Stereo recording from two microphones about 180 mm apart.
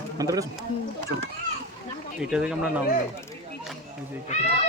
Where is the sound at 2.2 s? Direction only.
5° right (ahead or behind).